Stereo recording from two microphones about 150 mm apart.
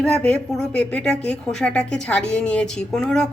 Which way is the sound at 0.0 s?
5° left (ahead or behind).